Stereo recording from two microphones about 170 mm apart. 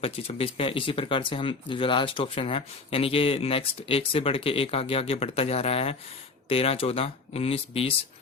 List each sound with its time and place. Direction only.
0.0 s speech: 35° left (ahead or behind)